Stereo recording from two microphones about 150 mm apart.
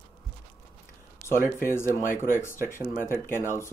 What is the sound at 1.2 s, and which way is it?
Speech, 15° left (ahead or behind).